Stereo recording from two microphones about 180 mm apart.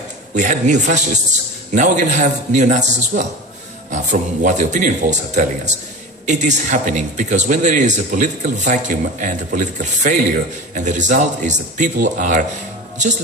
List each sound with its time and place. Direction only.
0.3 s a man's voice: 45° right (ahead or behind)